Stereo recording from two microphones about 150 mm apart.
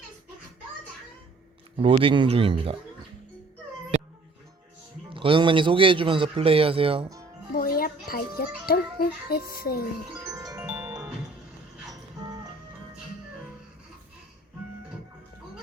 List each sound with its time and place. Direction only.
1.8 s a man's voice: 35° right (ahead or behind)
5.0 s a man's voice: 35° right (ahead or behind)
7.5 s a child's voice: 75° left (ahead or behind)
10.1 s music: 25° right (ahead or behind)
10.7 s music: 10° right (ahead or behind)